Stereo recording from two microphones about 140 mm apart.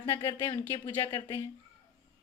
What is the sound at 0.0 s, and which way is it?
Speech, 15° left (ahead or behind).